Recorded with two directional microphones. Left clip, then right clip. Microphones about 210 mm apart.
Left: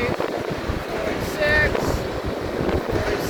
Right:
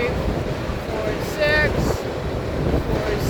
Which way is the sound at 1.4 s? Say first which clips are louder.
Even; 10° right (ahead or behind).